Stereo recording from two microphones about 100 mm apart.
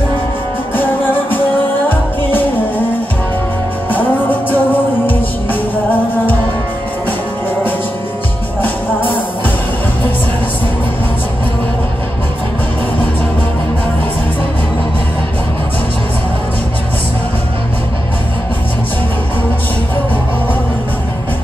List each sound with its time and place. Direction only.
0.7 s music: 20° left (ahead or behind)
3.9 s music: 20° left (ahead or behind)